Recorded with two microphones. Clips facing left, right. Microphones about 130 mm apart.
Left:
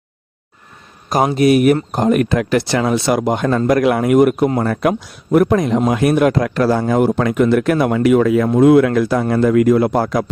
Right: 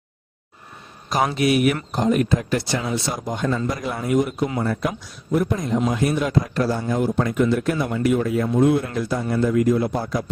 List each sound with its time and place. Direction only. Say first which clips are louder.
1.4 s speech: left 9 dB; 45° left (ahead or behind)
4.6 s speech: left 7 dB; 75° left (ahead or behind); by 10.2 s 90° left